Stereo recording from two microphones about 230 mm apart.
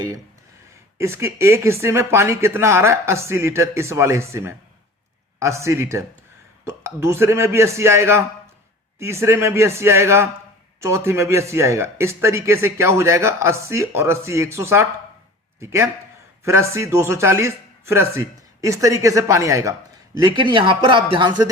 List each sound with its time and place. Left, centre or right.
0.9 s speech: centre